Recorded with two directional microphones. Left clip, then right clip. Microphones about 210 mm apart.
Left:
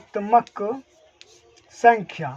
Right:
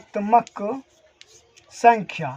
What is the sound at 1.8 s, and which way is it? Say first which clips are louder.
Speech: even; 10° left (ahead or behind).